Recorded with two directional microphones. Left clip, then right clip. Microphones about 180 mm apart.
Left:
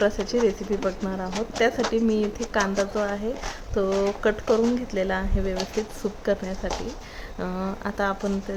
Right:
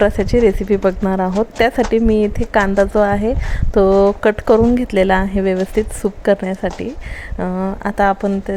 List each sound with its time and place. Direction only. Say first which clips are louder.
0.0 s speech: right 9 dB; 40° right (ahead or behind)